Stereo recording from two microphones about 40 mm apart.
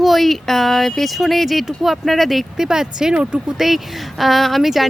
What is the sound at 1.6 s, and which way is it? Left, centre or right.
Speech, centre.